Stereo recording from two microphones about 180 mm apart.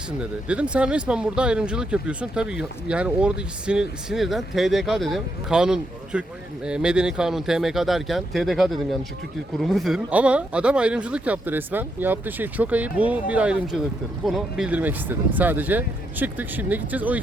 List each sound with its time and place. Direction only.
0.2 s speech: 5° right (ahead or behind)